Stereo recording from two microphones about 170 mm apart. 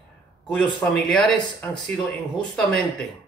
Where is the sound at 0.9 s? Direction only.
5° left (ahead or behind).